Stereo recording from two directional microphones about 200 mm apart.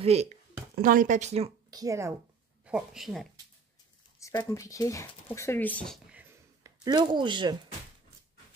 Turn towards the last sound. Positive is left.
turn(degrees=-25)  # may be behind; listen again after turning